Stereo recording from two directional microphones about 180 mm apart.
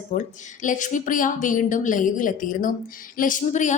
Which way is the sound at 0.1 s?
45° left (ahead or behind).